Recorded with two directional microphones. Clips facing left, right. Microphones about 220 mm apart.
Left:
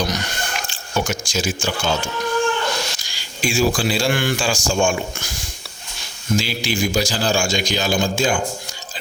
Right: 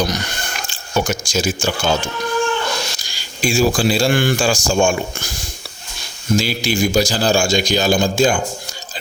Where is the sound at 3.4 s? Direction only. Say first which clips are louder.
Right 3 dB; 35° right (ahead or behind).